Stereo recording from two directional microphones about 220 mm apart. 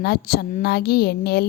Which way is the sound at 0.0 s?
45° left (ahead or behind).